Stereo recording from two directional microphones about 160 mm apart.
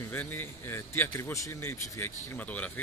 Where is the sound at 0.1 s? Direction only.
15° left (ahead or behind).